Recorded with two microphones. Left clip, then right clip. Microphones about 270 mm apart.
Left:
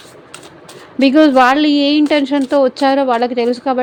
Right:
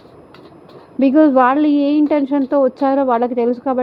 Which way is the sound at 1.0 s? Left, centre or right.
Centre.